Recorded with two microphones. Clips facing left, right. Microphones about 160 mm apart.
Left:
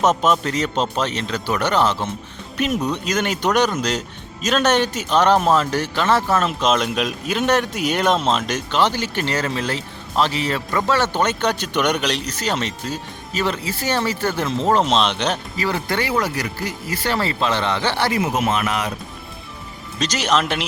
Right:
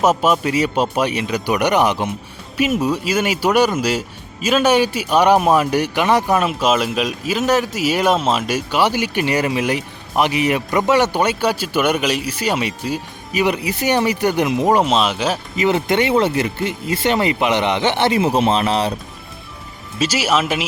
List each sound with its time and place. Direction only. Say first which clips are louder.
0.0 s speech: right 2 dB; 10° right (ahead or behind)
15.5 s speech: right 6 dB; 20° right (ahead or behind)
20.0 s speech: right 2 dB; 5° right (ahead or behind)